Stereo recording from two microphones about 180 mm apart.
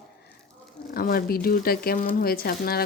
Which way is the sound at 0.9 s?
55° left (ahead or behind).